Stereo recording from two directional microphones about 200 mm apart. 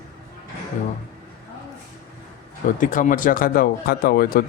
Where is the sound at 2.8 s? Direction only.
40° left (ahead or behind).